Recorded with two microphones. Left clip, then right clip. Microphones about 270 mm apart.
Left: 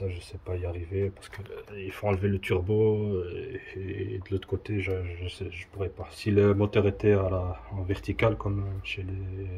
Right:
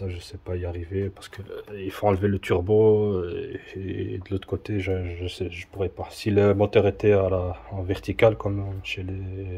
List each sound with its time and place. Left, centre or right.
0.0 s speech: centre